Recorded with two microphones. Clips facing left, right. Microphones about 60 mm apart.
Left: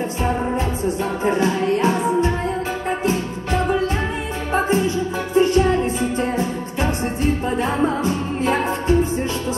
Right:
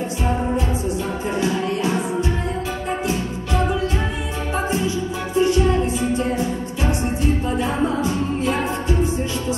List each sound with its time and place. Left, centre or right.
1.2 s music: left
5.4 s music: left